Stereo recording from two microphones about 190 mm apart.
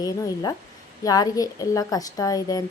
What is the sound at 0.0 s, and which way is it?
A woman's voice, 20° left (ahead or behind).